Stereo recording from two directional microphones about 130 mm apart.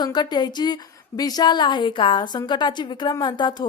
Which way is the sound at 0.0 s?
30° left (ahead or behind).